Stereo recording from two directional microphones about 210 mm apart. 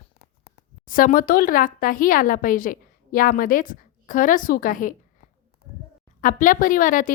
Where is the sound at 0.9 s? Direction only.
40° left (ahead or behind).